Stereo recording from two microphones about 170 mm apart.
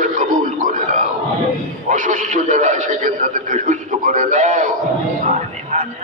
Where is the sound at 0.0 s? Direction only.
50° right (ahead or behind).